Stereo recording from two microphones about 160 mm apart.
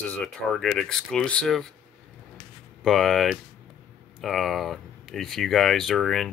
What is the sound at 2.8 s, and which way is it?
Speech, centre (ahead or behind).